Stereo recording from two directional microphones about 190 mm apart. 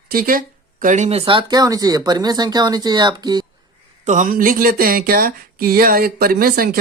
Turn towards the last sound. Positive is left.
turn(degrees=-50)  # may be behind; listen again after turning